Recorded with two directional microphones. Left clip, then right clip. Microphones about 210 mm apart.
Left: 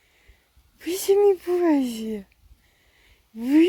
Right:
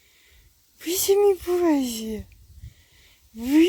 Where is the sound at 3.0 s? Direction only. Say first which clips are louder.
Left 1 dB; centre (ahead or behind).